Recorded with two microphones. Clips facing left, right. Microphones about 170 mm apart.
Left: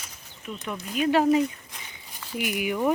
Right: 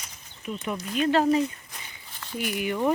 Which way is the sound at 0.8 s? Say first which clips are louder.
Left 1 dB; 5° left (ahead or behind).